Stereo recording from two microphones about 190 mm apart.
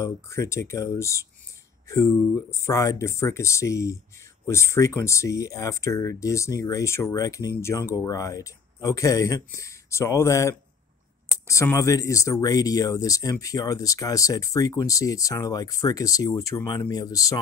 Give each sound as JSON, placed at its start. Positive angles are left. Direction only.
{"t": 0.0, "sound": "speech", "side_deg": 15}